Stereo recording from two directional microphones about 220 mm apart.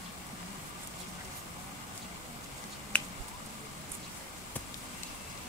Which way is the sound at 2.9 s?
5° left (ahead or behind).